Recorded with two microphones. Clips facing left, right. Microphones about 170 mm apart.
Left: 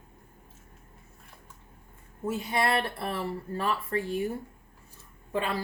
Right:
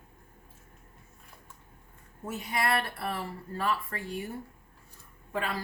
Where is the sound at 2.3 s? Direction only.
30° left (ahead or behind).